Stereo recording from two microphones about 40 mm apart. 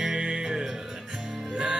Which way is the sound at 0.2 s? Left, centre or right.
Right.